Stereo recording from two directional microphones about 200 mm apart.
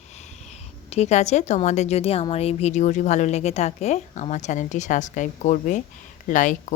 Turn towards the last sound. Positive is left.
turn(degrees=40)  # may be behind; listen again after turning